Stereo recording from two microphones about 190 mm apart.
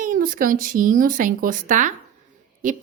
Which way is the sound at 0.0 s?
45° right (ahead or behind).